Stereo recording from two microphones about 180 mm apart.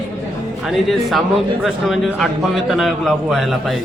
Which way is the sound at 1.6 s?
Centre (ahead or behind).